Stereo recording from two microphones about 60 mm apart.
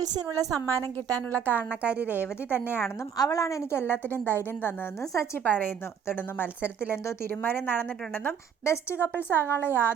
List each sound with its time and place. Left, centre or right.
0.3 s a woman's voice: right
1.0 s a woman's voice: right
1.5 s a woman's voice: right
2.2 s a woman's voice: left
3.2 s a woman's voice: left
5.1 s a woman's voice: left
5.4 s a woman's voice: left
8.6 s a woman's voice: left